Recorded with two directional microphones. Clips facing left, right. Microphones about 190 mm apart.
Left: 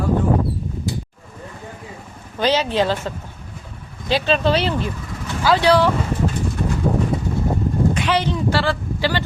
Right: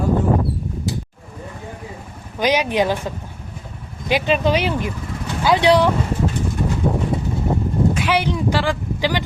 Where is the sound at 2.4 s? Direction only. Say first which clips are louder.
Even; 15° right (ahead or behind).